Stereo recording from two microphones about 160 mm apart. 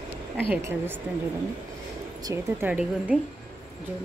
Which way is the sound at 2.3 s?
10° right (ahead or behind).